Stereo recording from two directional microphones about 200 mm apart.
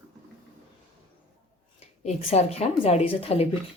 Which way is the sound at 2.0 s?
30° left (ahead or behind).